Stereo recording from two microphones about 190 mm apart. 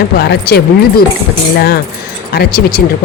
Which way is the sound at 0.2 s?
55° left (ahead or behind).